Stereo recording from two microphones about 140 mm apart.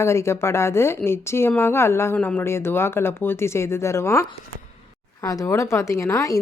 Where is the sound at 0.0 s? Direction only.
20° left (ahead or behind).